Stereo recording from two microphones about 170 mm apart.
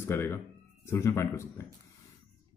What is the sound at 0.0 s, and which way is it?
Speech, 15° left (ahead or behind).